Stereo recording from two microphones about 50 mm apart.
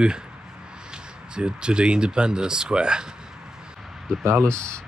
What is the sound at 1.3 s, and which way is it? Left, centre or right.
Speech, centre.